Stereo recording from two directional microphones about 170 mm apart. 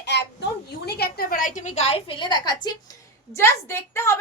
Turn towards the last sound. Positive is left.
turn(degrees=15)  # may be behind; listen again after turning